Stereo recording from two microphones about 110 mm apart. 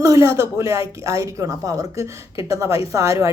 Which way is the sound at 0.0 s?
30° right (ahead or behind).